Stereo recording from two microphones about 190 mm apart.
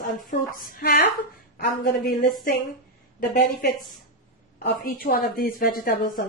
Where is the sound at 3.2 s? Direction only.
45° left (ahead or behind).